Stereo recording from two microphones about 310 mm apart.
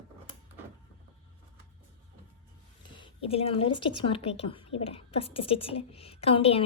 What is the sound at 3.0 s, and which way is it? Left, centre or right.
A woman's voice, centre.